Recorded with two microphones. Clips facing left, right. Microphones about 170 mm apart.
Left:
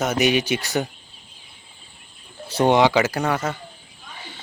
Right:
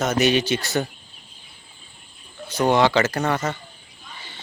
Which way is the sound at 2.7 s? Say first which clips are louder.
Left 1 dB; 15° left (ahead or behind).